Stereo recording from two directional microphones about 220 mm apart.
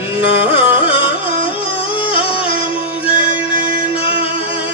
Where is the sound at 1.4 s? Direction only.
25° left (ahead or behind).